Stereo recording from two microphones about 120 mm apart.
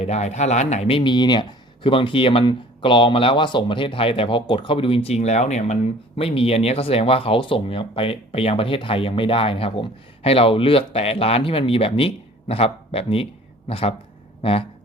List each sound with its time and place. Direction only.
0.0 s speech: 65° left (ahead or behind)